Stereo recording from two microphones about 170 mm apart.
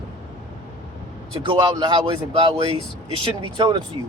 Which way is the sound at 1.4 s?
30° right (ahead or behind).